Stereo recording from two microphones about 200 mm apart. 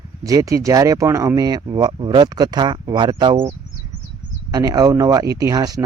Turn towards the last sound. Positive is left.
turn(degrees=-20)  # may be behind; listen again after turning